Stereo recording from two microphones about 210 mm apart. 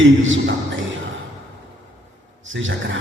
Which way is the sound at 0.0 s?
65° right (ahead or behind).